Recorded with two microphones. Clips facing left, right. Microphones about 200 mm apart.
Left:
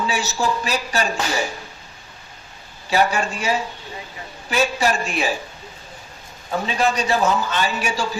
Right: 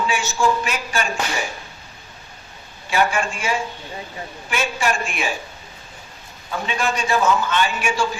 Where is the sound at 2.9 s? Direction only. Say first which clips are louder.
Left 1 dB; 35° left (ahead or behind).